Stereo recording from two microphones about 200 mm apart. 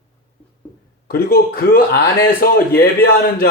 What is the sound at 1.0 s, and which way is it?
A man's voice, 50° left (ahead or behind).